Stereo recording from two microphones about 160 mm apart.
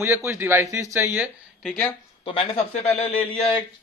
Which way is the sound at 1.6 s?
5° left (ahead or behind).